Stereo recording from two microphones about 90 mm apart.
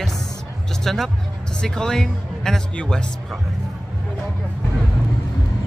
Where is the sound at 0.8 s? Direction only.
5° left (ahead or behind).